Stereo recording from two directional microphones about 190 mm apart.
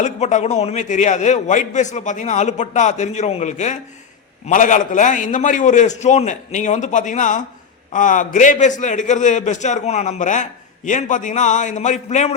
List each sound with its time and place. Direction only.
0.0 s a man's voice: 40° left (ahead or behind)